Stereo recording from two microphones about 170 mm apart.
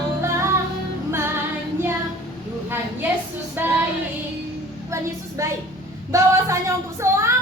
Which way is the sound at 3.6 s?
10° right (ahead or behind).